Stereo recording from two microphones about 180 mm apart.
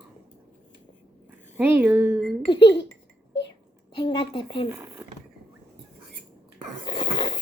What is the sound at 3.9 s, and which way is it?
Speech, 25° left (ahead or behind).